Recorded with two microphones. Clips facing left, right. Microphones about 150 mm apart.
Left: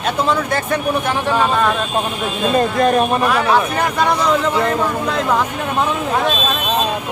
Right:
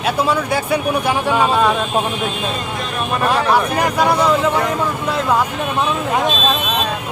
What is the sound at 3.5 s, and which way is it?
Speech, 10° right (ahead or behind).